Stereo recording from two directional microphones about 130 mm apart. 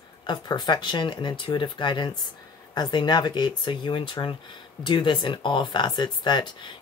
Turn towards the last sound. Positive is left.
turn(degrees=35)  # may be behind; listen again after turning